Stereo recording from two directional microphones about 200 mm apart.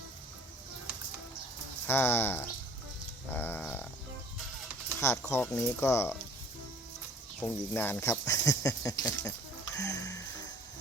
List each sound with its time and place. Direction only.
1.9 s speech: 10° left (ahead or behind)
4.9 s speech: 15° left (ahead or behind)
7.4 s speech: 10° left (ahead or behind)
9.7 s music: 15° left (ahead or behind)